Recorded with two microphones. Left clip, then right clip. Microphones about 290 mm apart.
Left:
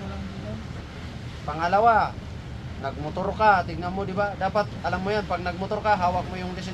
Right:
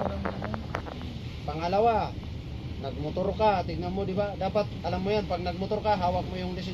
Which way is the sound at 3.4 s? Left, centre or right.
Centre.